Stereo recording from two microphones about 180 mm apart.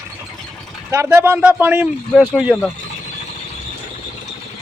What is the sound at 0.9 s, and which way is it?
Speech, 15° right (ahead or behind).